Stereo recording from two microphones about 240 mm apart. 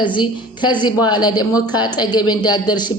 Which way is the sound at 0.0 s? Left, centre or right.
Centre.